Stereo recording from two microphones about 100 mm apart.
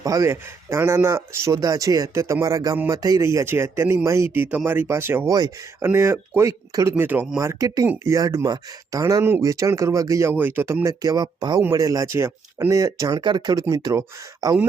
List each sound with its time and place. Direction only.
0.0 s speech: 35° right (ahead or behind)
6.9 s speech: 20° right (ahead or behind)
7.3 s speech: 35° right (ahead or behind)
10.3 s speech: 20° right (ahead or behind)
10.8 s speech: 35° right (ahead or behind)